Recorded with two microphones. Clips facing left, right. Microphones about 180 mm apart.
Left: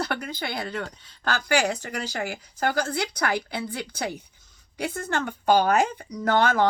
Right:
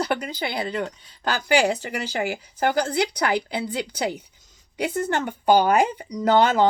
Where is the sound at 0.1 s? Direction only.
15° right (ahead or behind).